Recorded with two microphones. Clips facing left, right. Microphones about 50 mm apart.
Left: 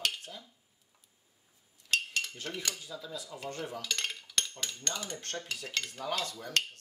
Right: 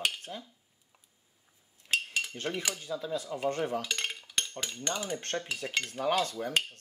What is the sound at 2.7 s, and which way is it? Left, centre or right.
Cutlery, right.